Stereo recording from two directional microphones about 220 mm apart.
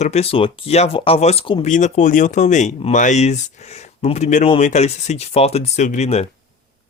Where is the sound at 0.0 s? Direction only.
30° left (ahead or behind).